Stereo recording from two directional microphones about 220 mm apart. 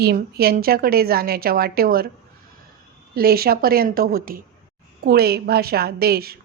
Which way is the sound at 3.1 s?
45° right (ahead or behind).